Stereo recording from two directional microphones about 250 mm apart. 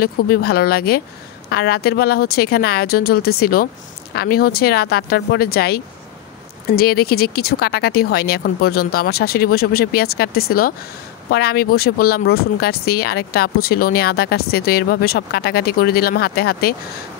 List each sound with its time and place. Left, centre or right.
0.0 s speech: left